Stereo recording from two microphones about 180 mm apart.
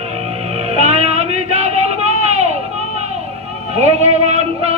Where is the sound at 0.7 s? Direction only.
35° right (ahead or behind).